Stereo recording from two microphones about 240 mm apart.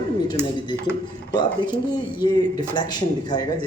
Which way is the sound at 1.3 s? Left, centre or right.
Centre.